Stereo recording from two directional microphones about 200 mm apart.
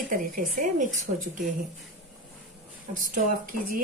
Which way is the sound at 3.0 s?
45° right (ahead or behind).